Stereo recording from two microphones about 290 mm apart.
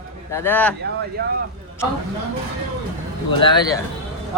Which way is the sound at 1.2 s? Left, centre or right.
Right.